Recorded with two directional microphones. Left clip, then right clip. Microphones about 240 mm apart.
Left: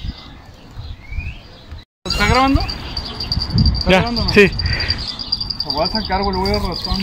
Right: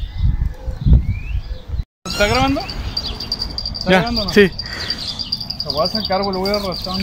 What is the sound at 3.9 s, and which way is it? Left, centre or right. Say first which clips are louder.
Speech: even; centre.